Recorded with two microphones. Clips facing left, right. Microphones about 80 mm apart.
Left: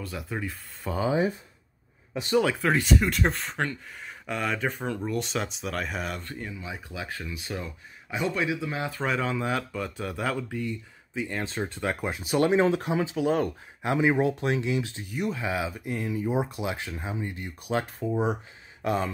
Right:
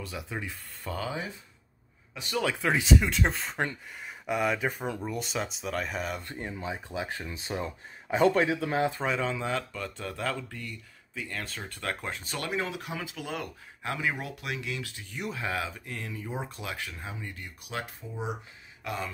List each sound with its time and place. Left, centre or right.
0.0 s speech: centre
2.6 s speech: centre
6.2 s speech: right
9.0 s speech: centre; by 11.7 s left
11.8 s speech: centre
12.4 s speech: left
15.1 s speech: centre
15.8 s speech: centre
17.7 s speech: left